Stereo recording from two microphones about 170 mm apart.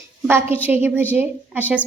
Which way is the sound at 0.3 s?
15° right (ahead or behind).